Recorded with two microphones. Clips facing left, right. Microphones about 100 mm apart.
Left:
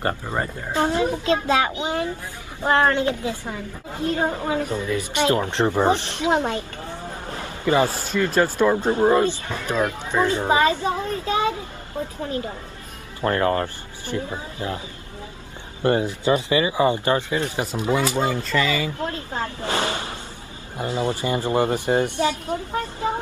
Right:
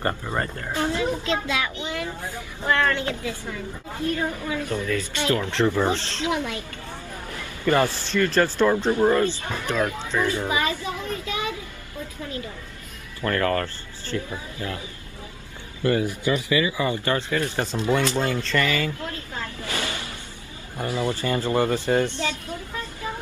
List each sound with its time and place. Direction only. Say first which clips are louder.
0.0 s speech: left 1 dB; 15° left (ahead or behind)
0.7 s a child's voice: left 4 dB; 30° left (ahead or behind)
2.6 s speech: left 4 dB; 25° left (ahead or behind)
4.2 s a child's voice: left 4 dB; 35° left (ahead or behind)
4.6 s speech: left 1 dB; 20° left (ahead or behind)
6.3 s a child's voice: left 8 dB; 35° left (ahead or behind)
7.2 s a sound: even; 30° left (ahead or behind)
8.4 s speech: left 2 dB; 15° left (ahead or behind)
10.4 s a sound: left 6 dB; 35° left (ahead or behind)
12.2 s a child's voice: left 5 dB; 35° left (ahead or behind)
15.8 s speech: left 2 dB; 25° left (ahead or behind)
18.9 s a sound: left 6 dB; 30° left (ahead or behind)
20.7 s speech: left 2 dB; 25° left (ahead or behind)